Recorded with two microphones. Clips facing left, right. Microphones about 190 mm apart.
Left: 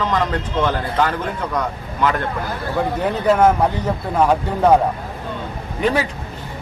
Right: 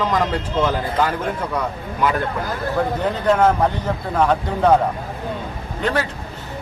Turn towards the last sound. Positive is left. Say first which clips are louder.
# left 3 dB
turn(degrees=10)  # may be behind; listen again after turning